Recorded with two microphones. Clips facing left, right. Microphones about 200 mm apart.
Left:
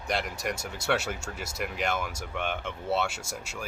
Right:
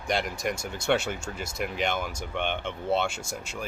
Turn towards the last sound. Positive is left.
turn(degrees=5)  # may be behind; listen again after turning